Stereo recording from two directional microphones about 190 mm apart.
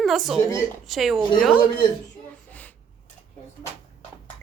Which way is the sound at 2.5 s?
10° left (ahead or behind).